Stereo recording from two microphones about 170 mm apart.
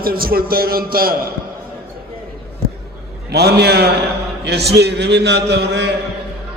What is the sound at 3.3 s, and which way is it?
A man's voice, 75° right (ahead or behind).